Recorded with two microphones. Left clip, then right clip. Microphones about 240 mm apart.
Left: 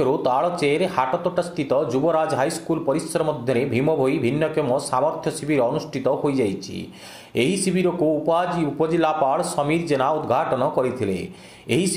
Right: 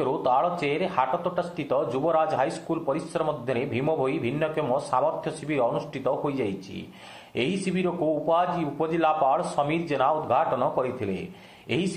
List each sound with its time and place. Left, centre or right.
0.0 s a man's voice: left